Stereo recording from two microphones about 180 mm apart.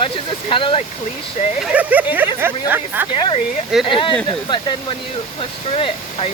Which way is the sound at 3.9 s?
30° left (ahead or behind).